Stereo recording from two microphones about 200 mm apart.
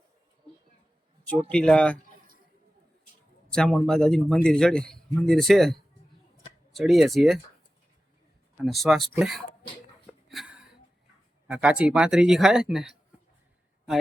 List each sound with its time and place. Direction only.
1.3 s a man's voice: 5° left (ahead or behind)
3.5 s a man's voice: 5° left (ahead or behind)
6.7 s a man's voice: centre (ahead or behind)
8.6 s a man's voice: centre (ahead or behind)
10.1 s a sound: centre (ahead or behind)
11.4 s a man's voice: 5° right (ahead or behind)